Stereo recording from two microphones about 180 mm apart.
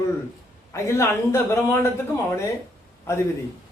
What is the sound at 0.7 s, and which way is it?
Speech, 15° left (ahead or behind).